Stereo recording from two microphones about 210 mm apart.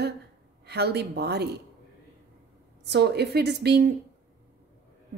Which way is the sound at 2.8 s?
55° right (ahead or behind).